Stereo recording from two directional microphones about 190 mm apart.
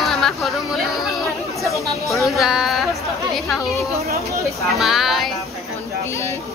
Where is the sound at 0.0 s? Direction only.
Centre (ahead or behind).